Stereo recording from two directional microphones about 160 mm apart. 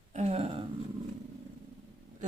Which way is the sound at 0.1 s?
40° right (ahead or behind).